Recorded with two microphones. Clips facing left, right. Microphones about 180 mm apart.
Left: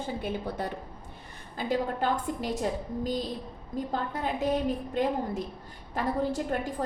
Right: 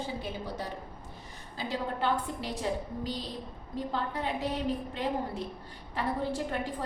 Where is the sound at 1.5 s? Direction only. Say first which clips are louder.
Left 5 dB; 45° left (ahead or behind).